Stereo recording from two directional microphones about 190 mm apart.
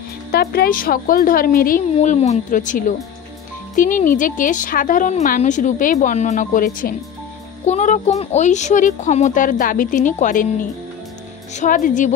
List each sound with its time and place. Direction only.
0.3 s a child's voice: 55° left (ahead or behind)